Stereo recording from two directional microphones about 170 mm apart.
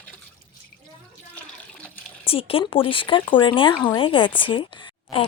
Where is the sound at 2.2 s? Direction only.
35° left (ahead or behind).